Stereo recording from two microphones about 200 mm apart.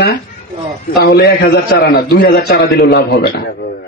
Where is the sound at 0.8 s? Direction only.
55° left (ahead or behind).